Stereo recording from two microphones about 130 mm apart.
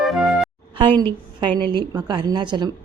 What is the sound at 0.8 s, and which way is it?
Speech, 40° right (ahead or behind).